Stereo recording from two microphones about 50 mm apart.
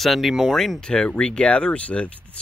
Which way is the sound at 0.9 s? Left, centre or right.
Centre.